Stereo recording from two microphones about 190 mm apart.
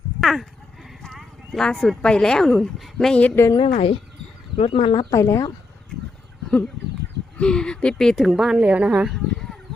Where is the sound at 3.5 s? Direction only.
30° left (ahead or behind).